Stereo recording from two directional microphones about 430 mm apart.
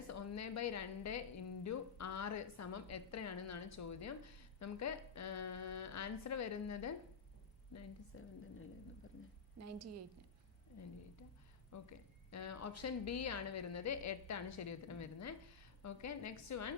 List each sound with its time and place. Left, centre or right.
0.1 s a woman's voice: left
9.6 s a woman's voice: right
11.7 s a woman's voice: left